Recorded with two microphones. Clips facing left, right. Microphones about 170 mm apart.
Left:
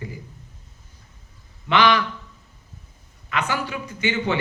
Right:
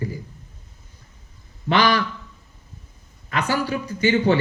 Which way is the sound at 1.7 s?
35° right (ahead or behind).